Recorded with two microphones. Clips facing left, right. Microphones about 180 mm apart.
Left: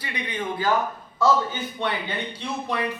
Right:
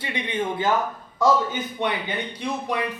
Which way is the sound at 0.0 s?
25° right (ahead or behind).